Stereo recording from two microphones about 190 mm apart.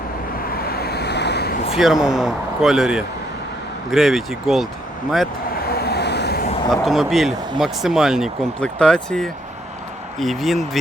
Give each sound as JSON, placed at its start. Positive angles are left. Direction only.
{"t": 0.4, "sound": "vehicle", "side_deg": 55}
{"t": 1.7, "sound": "speech", "side_deg": 0}
{"t": 5.5, "sound": "vehicle", "side_deg": 55}
{"t": 6.7, "sound": "speech", "side_deg": 0}